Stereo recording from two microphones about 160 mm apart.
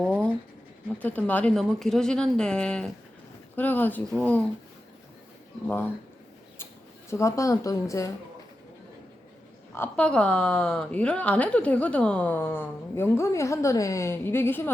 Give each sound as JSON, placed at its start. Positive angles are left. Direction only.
{"t": 0.0, "sound": "writing", "side_deg": 5}
{"t": 0.9, "sound": "a woman's voice", "side_deg": 10}
{"t": 5.6, "sound": "a woman's voice", "side_deg": 10}
{"t": 7.1, "sound": "speech", "side_deg": 20}
{"t": 9.7, "sound": "a woman's voice", "side_deg": 10}